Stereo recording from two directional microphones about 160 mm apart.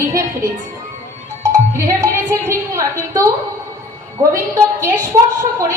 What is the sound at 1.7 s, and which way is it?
A woman's voice, 20° right (ahead or behind).